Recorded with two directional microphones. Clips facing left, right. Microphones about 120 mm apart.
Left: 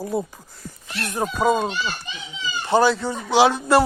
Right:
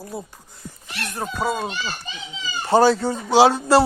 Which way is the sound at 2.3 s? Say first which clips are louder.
Right 2 dB; 35° right (ahead or behind).